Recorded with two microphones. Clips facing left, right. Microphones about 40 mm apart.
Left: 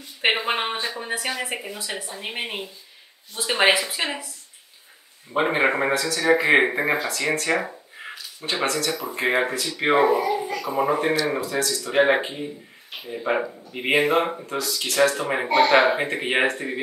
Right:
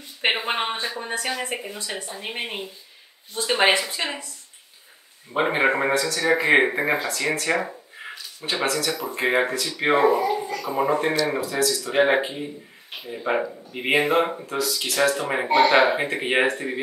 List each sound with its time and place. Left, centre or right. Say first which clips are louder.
0.2 s speech: left 1 dB; centre
5.3 s speech: even; centre